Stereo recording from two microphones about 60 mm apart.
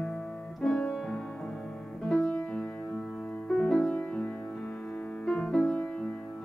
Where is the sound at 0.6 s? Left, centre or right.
Centre.